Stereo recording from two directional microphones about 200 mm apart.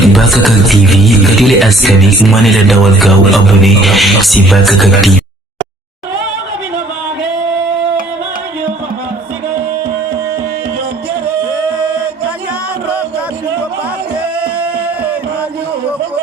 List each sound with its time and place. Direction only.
0.0 s speech: centre (ahead or behind)